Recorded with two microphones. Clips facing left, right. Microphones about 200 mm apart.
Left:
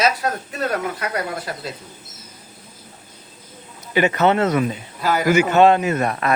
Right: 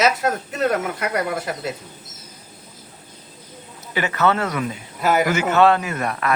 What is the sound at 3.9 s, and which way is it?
Speech, 20° left (ahead or behind).